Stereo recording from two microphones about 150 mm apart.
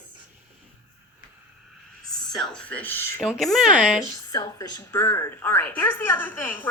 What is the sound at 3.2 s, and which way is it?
Speech, centre (ahead or behind).